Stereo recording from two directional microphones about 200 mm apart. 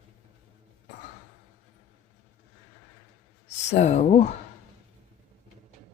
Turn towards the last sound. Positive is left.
turn(degrees=35)  # may be behind; listen again after turning